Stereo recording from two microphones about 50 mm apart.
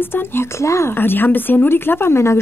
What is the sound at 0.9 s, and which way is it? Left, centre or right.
A woman's voice, left.